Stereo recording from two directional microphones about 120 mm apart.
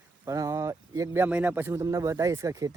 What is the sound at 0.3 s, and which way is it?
Speech, 25° right (ahead or behind).